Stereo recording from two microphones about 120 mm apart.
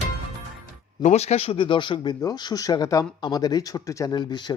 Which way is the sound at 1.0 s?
65° left (ahead or behind).